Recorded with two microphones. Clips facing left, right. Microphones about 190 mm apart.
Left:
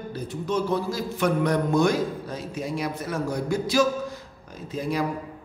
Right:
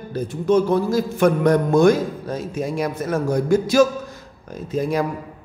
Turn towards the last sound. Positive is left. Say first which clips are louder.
# right 5 dB
turn(degrees=-45)  # may be behind; listen again after turning